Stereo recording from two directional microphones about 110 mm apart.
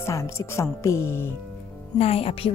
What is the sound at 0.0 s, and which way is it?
Speech, 25° left (ahead or behind).